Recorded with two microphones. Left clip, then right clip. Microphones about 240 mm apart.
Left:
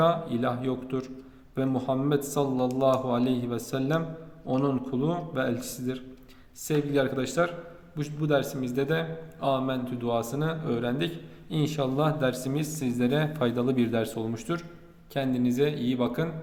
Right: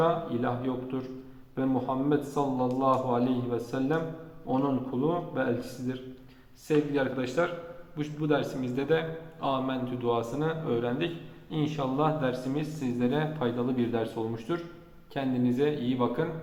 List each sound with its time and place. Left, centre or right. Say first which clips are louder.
0.0 s a man's voice: left 2 dB; left